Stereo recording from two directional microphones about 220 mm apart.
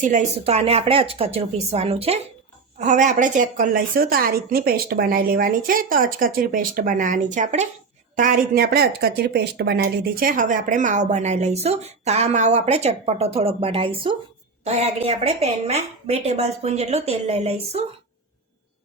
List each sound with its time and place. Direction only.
0.0 s a woman's voice: 35° right (ahead or behind)